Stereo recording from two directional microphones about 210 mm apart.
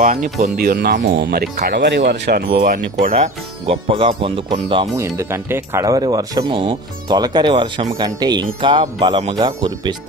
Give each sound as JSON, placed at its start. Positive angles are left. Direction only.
{"t": 0.0, "sound": "speech", "side_deg": -35}
{"t": 0.6, "sound": "speech", "side_deg": -45}
{"t": 3.6, "sound": "speech", "side_deg": -25}
{"t": 4.9, "sound": "speech", "side_deg": -15}